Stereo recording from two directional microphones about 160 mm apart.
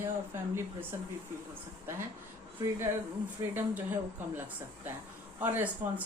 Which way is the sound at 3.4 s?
20° right (ahead or behind).